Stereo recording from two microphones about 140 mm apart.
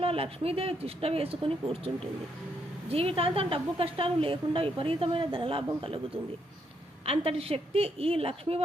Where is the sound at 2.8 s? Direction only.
45° right (ahead or behind).